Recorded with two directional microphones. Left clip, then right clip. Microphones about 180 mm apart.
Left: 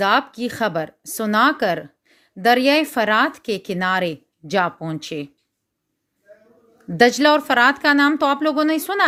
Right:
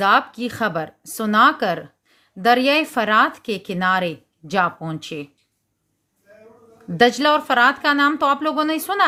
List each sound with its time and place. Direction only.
0.0 s speech: 35° left (ahead or behind)
6.9 s speech: 35° left (ahead or behind)